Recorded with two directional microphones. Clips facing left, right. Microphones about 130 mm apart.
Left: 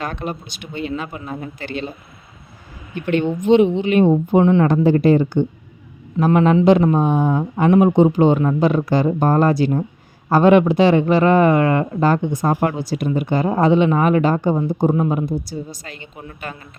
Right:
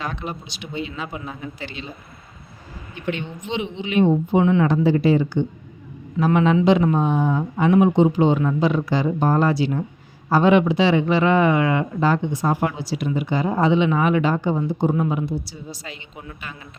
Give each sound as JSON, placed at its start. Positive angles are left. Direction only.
{"t": 0.0, "sound": "speech", "side_deg": 50}
{"t": 1.0, "sound": "a man's voice", "side_deg": 0}
{"t": 1.3, "sound": "speech", "side_deg": 50}
{"t": 2.9, "sound": "speech", "side_deg": 50}